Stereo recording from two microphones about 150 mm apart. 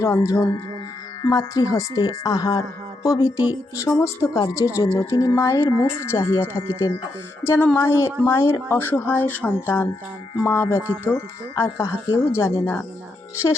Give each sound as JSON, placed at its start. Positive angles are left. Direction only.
{"t": 0.0, "sound": "speech", "side_deg": 20}
{"t": 7.4, "sound": "speech", "side_deg": 15}